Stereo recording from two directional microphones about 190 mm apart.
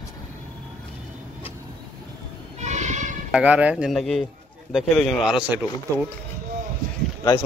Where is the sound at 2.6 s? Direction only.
40° right (ahead or behind).